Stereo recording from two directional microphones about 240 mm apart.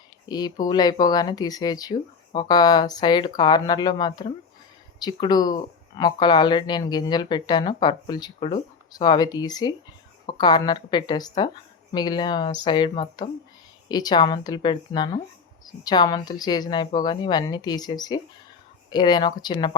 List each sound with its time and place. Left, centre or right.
0.3 s speech: centre